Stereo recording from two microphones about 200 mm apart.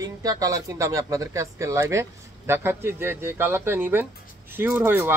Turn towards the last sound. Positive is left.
turn(degrees=-10)  # may be behind; listen again after turning